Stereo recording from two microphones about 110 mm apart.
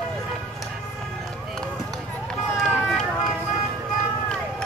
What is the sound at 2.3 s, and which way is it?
Run, 5° left (ahead or behind).